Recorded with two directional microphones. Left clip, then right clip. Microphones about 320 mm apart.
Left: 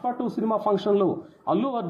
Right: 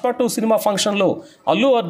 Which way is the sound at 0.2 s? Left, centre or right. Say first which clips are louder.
Right 8 dB; right.